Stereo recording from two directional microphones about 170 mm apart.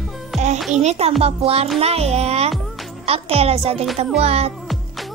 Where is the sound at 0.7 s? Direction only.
40° right (ahead or behind).